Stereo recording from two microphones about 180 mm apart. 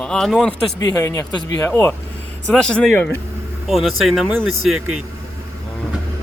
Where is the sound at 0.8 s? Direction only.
20° left (ahead or behind).